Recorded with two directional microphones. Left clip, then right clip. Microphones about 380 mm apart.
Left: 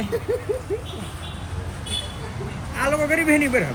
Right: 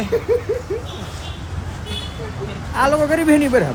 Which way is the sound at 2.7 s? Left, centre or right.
Right.